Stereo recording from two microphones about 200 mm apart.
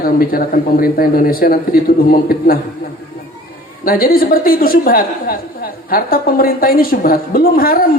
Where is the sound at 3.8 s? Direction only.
45° left (ahead or behind).